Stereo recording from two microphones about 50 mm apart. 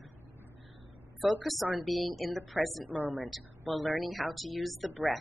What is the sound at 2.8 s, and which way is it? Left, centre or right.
Speech, right.